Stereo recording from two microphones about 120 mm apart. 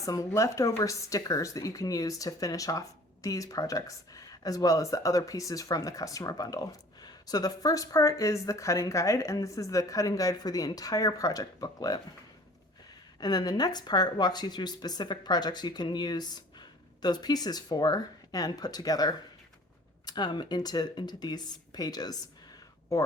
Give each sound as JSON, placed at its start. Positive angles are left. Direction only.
{"t": 0.0, "sound": "speech", "side_deg": 25}
{"t": 13.1, "sound": "speech", "side_deg": 35}